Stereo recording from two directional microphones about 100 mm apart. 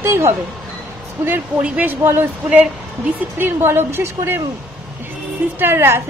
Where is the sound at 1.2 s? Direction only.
15° right (ahead or behind).